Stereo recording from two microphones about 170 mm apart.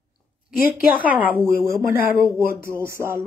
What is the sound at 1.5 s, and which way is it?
Speech, 65° left (ahead or behind).